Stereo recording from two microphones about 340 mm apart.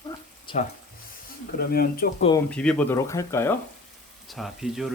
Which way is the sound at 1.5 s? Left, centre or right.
Left.